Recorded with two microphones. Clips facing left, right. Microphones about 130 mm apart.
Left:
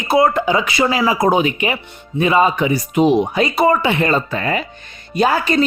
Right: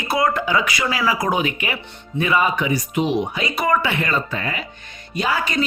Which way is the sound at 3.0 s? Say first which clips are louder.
Left 9 dB; 40° left (ahead or behind).